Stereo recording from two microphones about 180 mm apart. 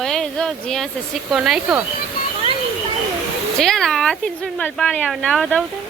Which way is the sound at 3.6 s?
Centre (ahead or behind).